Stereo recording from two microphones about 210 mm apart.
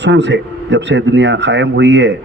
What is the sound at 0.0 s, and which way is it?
A man's voice, 55° right (ahead or behind).